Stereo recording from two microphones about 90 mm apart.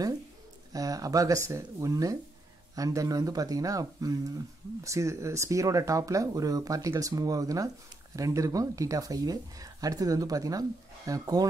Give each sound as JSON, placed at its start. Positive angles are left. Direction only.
{"t": 0.7, "sound": "speech", "side_deg": -40}